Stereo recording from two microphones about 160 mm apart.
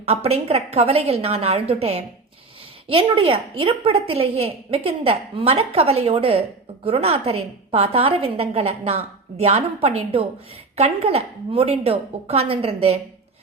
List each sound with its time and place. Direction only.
0.0 s a woman's voice: 40° right (ahead or behind)